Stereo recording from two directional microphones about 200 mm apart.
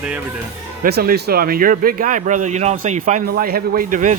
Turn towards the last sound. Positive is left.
turn(degrees=-40)  # may be behind; listen again after turning